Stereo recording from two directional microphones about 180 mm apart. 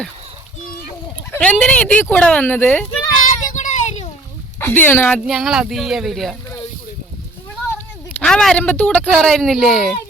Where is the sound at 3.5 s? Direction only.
40° left (ahead or behind).